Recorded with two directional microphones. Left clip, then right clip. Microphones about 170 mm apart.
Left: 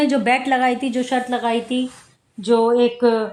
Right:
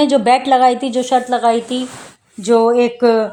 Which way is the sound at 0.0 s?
35° right (ahead or behind).